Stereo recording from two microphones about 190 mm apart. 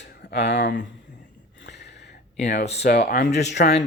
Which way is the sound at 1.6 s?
65° left (ahead or behind).